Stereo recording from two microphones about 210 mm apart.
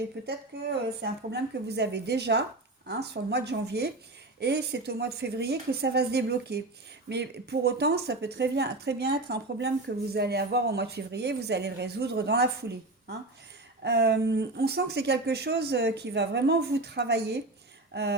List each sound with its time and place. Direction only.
0.2 s a woman's voice: 50° right (ahead or behind)